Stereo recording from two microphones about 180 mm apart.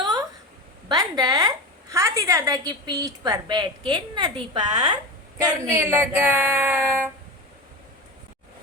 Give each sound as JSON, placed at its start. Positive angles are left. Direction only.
{"t": 0.9, "sound": "a woman's voice", "side_deg": -20}